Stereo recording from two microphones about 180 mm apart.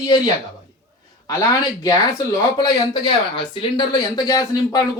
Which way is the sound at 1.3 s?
20° left (ahead or behind).